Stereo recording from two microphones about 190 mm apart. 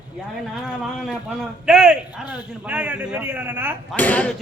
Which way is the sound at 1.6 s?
5° right (ahead or behind).